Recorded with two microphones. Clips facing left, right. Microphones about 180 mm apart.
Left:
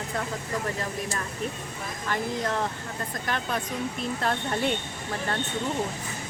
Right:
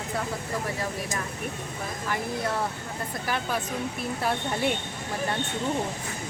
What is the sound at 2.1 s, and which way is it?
Speech, 10° right (ahead or behind).